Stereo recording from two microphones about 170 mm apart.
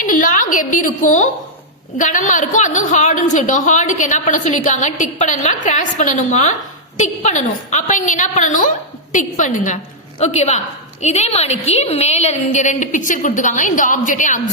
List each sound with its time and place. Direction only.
0.0 s a woman's voice: 50° left (ahead or behind)